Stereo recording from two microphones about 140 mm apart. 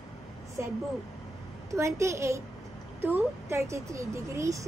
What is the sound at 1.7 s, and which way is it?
Speech, 20° right (ahead or behind).